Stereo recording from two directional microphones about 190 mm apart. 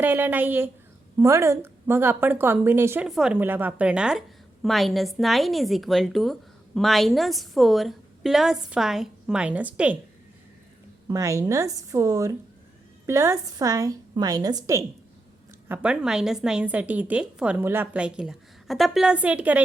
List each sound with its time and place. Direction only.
0.0 s a woman's voice: 10° right (ahead or behind)
11.1 s a woman's voice: 15° right (ahead or behind)
15.7 s a woman's voice: 5° right (ahead or behind)